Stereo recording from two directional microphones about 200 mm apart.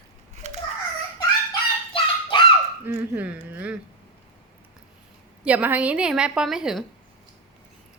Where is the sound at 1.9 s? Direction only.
25° left (ahead or behind).